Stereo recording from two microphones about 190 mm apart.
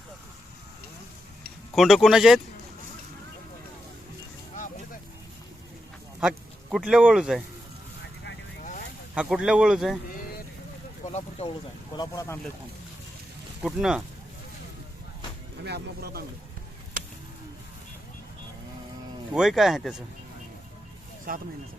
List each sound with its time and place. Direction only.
1.7 s speech: centre (ahead or behind)
6.1 s speech: 5° right (ahead or behind)
9.1 s speech: 5° right (ahead or behind)
10.1 s a sound: 45° left (ahead or behind)
11.0 s speech: 30° left (ahead or behind)
11.9 s speech: 15° left (ahead or behind)
13.6 s speech: 5° right (ahead or behind)
15.6 s speech: 60° right (ahead or behind)
19.3 s speech: centre (ahead or behind)
21.3 s speech: 50° right (ahead or behind)